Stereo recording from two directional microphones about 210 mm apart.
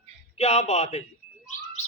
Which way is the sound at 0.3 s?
30° left (ahead or behind).